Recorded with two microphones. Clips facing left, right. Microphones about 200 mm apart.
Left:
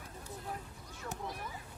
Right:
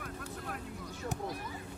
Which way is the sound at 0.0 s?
75° right (ahead or behind).